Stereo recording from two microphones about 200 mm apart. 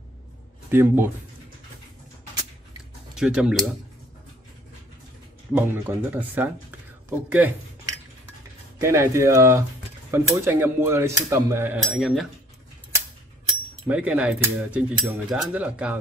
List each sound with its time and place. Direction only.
0.7 s speech: 10° right (ahead or behind)
3.2 s speech: 5° right (ahead or behind)
5.5 s speech: 10° right (ahead or behind)
8.7 s speech: 15° right (ahead or behind)
13.8 s speech: 5° right (ahead or behind)